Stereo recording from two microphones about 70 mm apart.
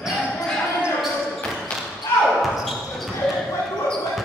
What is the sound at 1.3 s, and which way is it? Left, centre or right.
Basketball bounce, centre.